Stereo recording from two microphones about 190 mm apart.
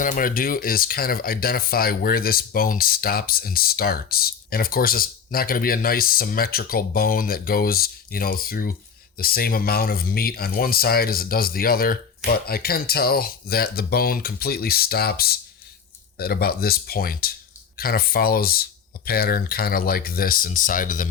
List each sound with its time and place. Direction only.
0.0 s speech: 45° left (ahead or behind)